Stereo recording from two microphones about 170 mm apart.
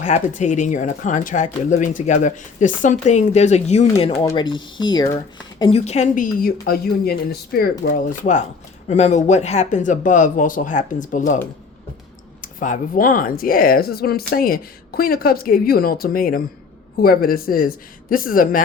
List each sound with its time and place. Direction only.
0.0 s speech: 45° left (ahead or behind); by 5.8 s 30° left (ahead or behind)
5.8 s speech: 40° left (ahead or behind)
6.4 s speech: 65° left (ahead or behind)
12.4 s speech: 50° left (ahead or behind)